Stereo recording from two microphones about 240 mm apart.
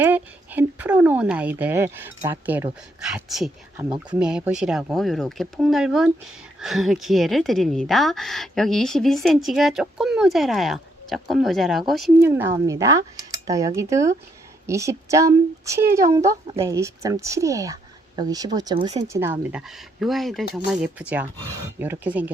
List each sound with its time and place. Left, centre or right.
0.0 s speech: centre
3.8 s speech: centre
4.2 s speech: centre; by 19.0 s right
19.0 s speech: centre